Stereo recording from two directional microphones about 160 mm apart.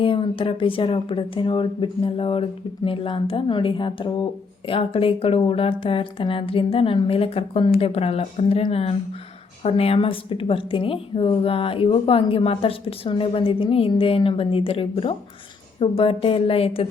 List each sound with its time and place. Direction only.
0.0 s a woman's voice: 35° left (ahead or behind)